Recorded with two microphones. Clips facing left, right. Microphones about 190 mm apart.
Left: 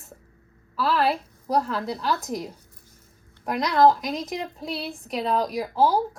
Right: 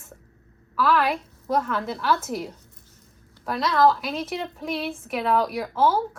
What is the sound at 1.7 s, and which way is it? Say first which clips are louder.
A woman's voice: right 2 dB; 15° left (ahead or behind).